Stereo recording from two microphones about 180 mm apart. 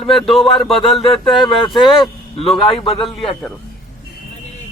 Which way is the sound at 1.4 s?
25° left (ahead or behind).